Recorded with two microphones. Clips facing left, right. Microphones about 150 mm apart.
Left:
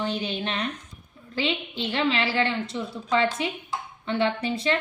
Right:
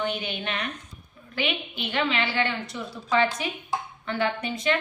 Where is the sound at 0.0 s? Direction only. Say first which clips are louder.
Left 1 dB; 30° left (ahead or behind).